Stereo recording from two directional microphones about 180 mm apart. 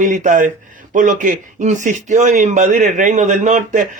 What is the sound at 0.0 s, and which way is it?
A man's voice, 45° right (ahead or behind).